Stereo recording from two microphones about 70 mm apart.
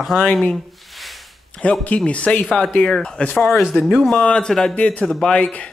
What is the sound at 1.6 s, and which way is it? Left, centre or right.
Speech, centre.